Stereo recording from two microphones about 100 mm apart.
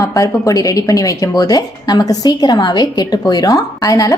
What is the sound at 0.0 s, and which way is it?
Speech, 35° left (ahead or behind).